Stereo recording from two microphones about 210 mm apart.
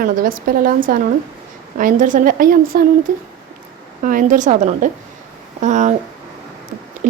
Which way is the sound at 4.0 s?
40° right (ahead or behind).